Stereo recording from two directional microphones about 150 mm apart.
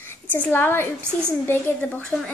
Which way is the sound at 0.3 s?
15° left (ahead or behind).